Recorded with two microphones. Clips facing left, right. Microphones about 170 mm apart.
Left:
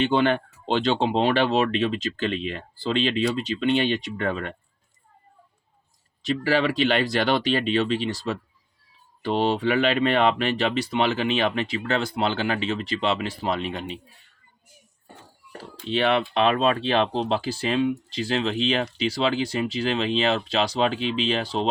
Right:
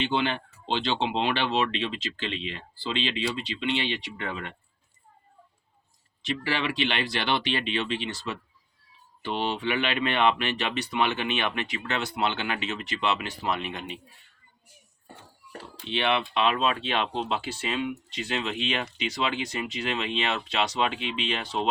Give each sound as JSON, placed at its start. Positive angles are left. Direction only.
{"t": 0.0, "sound": "speech", "side_deg": 50}
{"t": 6.2, "sound": "speech", "side_deg": 40}
{"t": 15.9, "sound": "speech", "side_deg": 40}